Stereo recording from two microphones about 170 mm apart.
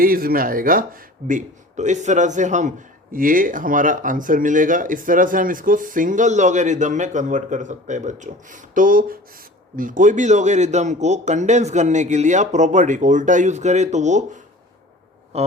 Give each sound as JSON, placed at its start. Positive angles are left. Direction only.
{"t": 0.0, "sound": "a man's voice", "side_deg": -60}
{"t": 15.3, "sound": "music", "side_deg": -40}